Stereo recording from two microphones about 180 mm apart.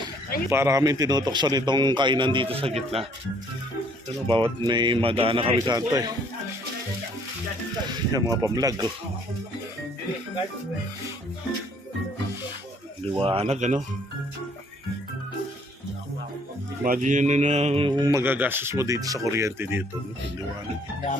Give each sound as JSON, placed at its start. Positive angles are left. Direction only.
{"t": 0.5, "sound": "mantra", "side_deg": -15}
{"t": 4.3, "sound": "mantra", "side_deg": -30}
{"t": 8.1, "sound": "mantra", "side_deg": -20}
{"t": 13.1, "sound": "speech", "side_deg": -30}
{"t": 16.8, "sound": "mantra", "side_deg": -50}